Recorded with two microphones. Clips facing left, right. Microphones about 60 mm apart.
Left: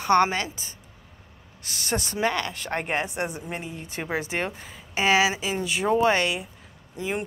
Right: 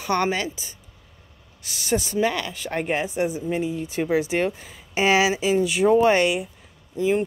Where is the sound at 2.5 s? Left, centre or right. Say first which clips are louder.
Right 2 dB; left.